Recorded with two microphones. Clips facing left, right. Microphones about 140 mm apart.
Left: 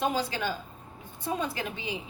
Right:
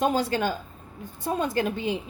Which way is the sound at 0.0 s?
45° right (ahead or behind).